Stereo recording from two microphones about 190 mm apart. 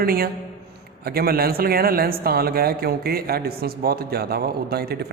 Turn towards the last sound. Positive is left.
turn(degrees=-55)  # may be behind; listen again after turning